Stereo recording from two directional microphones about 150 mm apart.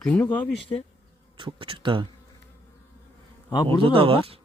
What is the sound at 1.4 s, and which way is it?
Speech, 35° right (ahead or behind).